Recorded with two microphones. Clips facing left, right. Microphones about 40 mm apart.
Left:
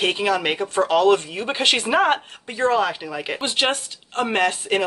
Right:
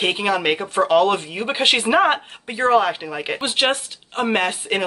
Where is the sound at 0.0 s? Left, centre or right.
Centre.